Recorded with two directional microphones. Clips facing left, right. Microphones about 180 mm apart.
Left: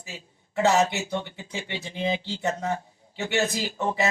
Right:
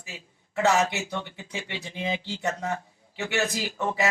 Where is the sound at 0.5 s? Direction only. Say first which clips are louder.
Left 2 dB; 35° left (ahead or behind).